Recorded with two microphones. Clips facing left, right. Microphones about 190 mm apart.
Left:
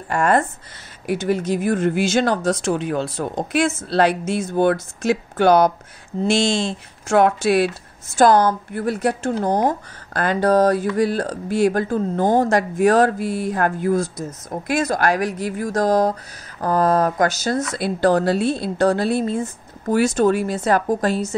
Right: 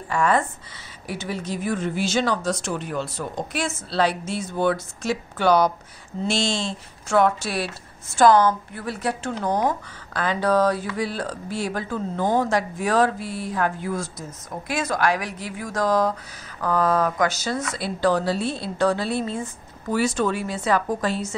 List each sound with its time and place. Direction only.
0.1 s a woman's voice: 50° left (ahead or behind)
2.6 s a woman's voice: 85° left; by 21.4 s 40° left (ahead or behind)